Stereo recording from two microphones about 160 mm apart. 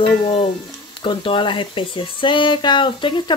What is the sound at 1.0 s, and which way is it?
Speech, 30° left (ahead or behind).